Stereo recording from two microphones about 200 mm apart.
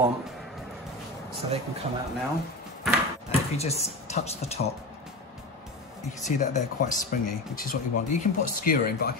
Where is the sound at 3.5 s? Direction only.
30° left (ahead or behind).